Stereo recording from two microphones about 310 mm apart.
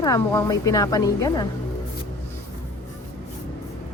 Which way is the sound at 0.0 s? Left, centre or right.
Centre.